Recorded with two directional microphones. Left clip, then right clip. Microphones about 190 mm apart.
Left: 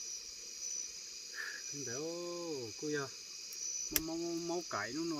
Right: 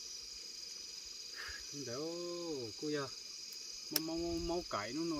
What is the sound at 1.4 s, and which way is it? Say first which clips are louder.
Cricket: left 4 dB; centre (ahead or behind).